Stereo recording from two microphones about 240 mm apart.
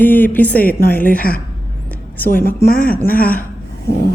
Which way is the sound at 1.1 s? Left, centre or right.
Left.